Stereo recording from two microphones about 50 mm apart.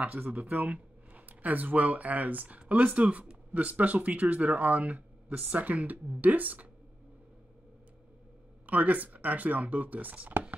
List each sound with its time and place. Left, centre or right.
0.0 s speech: right
8.6 s speech: right